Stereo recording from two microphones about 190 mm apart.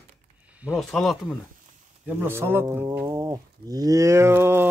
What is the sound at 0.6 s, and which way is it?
Speech, centre (ahead or behind).